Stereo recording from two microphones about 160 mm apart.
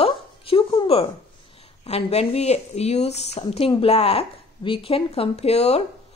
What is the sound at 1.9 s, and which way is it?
Speech, 40° left (ahead or behind).